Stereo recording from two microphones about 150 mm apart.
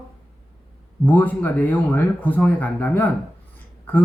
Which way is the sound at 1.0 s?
10° left (ahead or behind).